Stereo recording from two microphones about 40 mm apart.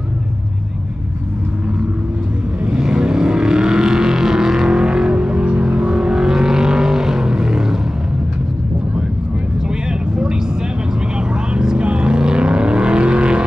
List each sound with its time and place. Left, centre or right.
2.6 s vehicle: centre
11.1 s vehicle: right